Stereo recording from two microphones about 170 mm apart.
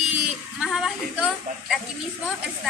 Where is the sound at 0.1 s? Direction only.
Centre (ahead or behind).